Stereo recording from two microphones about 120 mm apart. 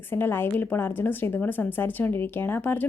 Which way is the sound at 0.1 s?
20° left (ahead or behind).